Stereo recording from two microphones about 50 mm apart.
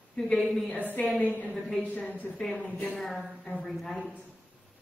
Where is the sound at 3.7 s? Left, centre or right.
Centre.